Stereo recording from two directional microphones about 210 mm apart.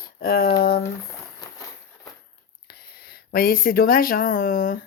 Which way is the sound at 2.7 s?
50° left (ahead or behind).